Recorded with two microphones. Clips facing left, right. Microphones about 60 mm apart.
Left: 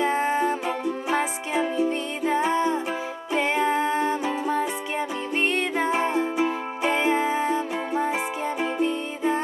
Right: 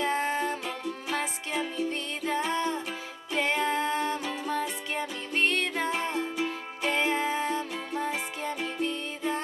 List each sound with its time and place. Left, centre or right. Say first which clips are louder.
0.0 s music: left 5 dB; centre